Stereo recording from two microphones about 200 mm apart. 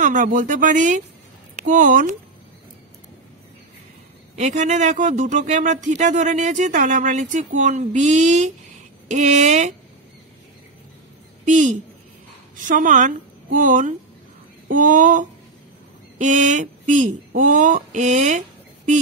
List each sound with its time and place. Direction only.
0.0 s speech: 40° right (ahead or behind)
4.4 s speech: 35° right (ahead or behind)
11.4 s a woman's voice: 40° right (ahead or behind)